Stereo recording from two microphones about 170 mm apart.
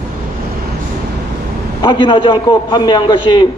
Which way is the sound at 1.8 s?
30° left (ahead or behind).